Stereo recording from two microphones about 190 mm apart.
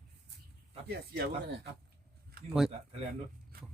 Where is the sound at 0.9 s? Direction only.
60° right (ahead or behind).